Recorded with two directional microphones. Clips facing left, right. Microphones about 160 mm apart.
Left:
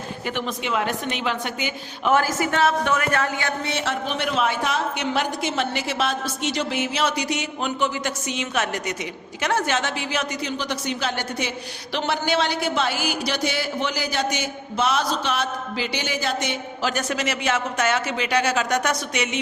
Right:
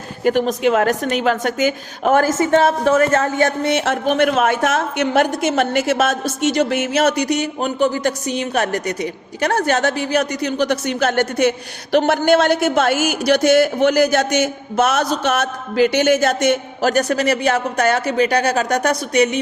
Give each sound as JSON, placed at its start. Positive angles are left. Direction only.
{"t": 0.3, "sound": "speech", "side_deg": -40}
{"t": 2.4, "sound": "speech", "side_deg": -30}
{"t": 3.4, "sound": "speech", "side_deg": -50}
{"t": 7.3, "sound": "speech", "side_deg": -40}
{"t": 10.4, "sound": "speech", "side_deg": -55}